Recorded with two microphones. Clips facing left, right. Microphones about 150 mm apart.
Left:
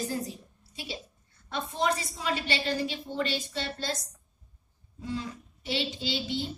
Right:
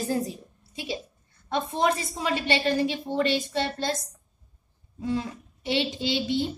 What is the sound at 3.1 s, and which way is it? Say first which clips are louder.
Speech: right 5 dB; 70° right (ahead or behind).